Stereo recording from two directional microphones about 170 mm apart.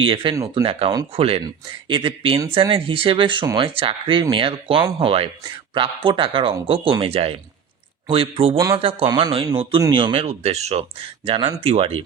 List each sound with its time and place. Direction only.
0.0 s speech: 30° right (ahead or behind)
8.5 s speech: 20° right (ahead or behind)
8.8 s speech: 35° right (ahead or behind)